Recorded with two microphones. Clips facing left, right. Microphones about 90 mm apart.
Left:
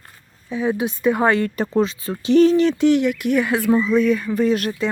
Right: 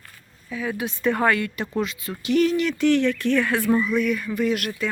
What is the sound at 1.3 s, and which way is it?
Speech, 35° left (ahead or behind).